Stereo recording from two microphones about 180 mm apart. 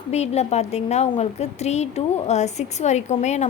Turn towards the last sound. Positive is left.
turn(degrees=40)  # may be behind; listen again after turning